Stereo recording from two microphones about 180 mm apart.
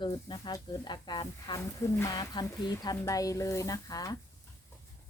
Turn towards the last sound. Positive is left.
turn(degrees=20)  # may be behind; listen again after turning